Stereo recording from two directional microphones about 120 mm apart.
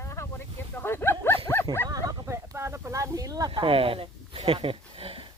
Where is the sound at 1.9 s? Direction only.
30° right (ahead or behind).